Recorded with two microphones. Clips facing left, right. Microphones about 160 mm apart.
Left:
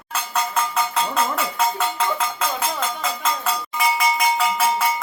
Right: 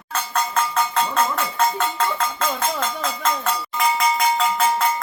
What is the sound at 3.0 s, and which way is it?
Cowbell, 5° left (ahead or behind).